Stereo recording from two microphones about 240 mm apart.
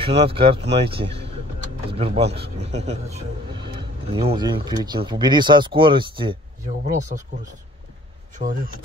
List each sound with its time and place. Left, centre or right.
0.0 s speech: right
8.5 s speech: right